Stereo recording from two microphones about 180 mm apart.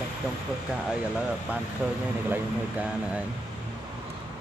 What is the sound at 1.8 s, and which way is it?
Speech, 5° left (ahead or behind).